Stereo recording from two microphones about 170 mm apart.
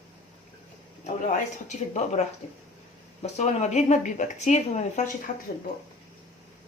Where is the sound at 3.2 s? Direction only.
40° left (ahead or behind).